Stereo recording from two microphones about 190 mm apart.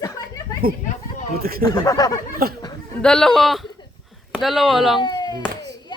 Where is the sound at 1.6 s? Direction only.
20° left (ahead or behind).